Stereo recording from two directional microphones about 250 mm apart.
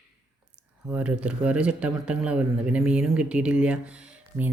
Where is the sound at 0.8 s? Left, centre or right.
Centre.